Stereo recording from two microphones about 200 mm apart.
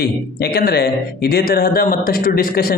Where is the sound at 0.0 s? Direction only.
55° left (ahead or behind).